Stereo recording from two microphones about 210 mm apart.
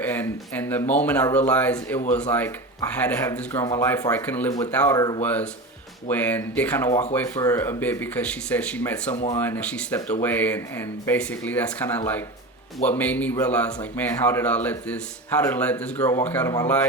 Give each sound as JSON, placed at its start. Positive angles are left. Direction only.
{"t": 0.0, "sound": "speech", "side_deg": 10}
{"t": 4.9, "sound": "speech", "side_deg": 20}
{"t": 5.2, "sound": "speech", "side_deg": 5}